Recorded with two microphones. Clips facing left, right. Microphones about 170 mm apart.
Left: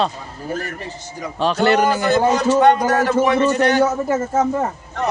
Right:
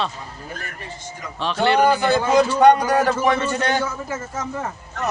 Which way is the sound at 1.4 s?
40° left (ahead or behind).